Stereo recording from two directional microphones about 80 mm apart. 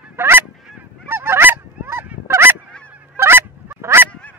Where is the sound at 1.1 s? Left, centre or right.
Right.